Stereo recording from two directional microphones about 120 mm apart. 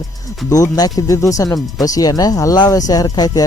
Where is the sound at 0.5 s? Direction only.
30° left (ahead or behind).